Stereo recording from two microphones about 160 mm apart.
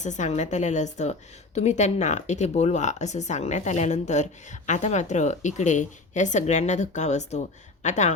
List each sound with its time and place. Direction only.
0.0 s speech: 50° left (ahead or behind)